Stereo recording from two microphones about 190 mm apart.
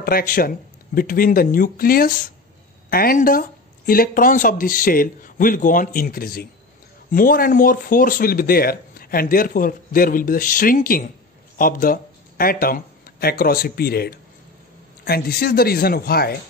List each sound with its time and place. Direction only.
0.0 s speech: 50° left (ahead or behind)